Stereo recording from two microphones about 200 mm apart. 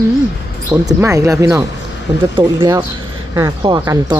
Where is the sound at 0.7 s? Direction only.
15° right (ahead or behind).